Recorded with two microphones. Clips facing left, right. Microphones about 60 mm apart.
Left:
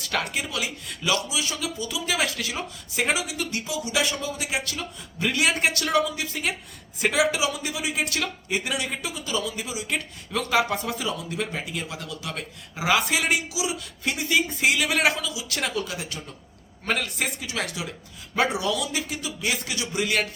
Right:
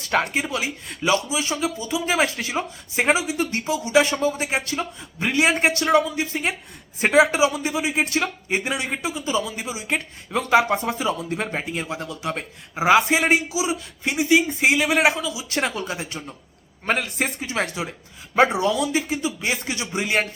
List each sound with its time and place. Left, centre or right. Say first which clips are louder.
0.0 s a man's voice: right 6 dB; right